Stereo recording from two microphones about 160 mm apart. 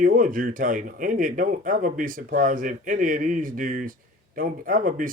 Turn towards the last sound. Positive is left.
turn(degrees=-60)  # may be behind; listen again after turning